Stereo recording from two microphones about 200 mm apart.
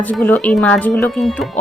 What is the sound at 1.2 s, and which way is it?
Speech, centre (ahead or behind).